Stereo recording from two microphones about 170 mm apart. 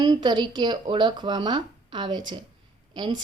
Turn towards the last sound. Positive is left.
turn(degrees=-25)  # may be behind; listen again after turning